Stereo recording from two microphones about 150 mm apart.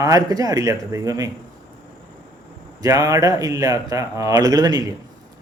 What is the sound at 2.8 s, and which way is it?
Speech, 25° right (ahead or behind).